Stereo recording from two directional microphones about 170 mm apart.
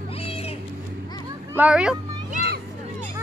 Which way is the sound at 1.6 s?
5° right (ahead or behind).